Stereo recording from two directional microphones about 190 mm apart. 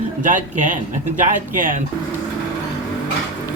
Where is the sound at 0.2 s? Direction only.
40° right (ahead or behind).